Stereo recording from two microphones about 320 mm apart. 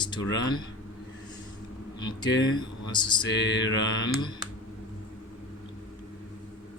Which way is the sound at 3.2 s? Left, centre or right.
Left.